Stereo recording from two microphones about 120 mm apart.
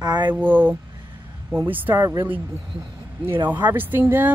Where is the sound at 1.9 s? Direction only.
35° right (ahead or behind).